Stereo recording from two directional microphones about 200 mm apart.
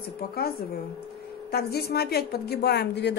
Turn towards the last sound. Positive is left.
turn(degrees=55)  # may be behind; listen again after turning